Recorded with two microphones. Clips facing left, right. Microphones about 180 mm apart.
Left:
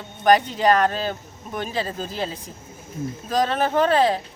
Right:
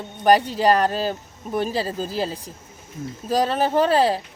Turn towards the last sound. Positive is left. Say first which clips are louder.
# even
turn(degrees=-35)  # may be behind; listen again after turning